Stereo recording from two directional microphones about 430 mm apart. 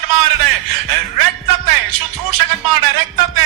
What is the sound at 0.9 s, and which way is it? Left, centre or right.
Music, right.